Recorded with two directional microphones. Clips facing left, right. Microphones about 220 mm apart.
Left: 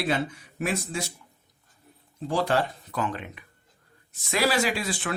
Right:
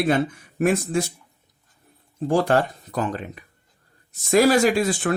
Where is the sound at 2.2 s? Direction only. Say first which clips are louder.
Right 6 dB; 50° right (ahead or behind).